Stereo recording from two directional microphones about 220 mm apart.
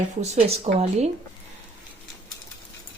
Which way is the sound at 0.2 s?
30° right (ahead or behind).